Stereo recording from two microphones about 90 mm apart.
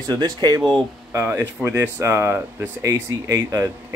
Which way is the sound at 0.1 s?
50° right (ahead or behind).